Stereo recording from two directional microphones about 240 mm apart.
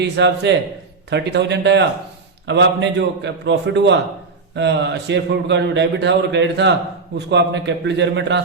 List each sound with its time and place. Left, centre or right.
0.0 s a man's voice: right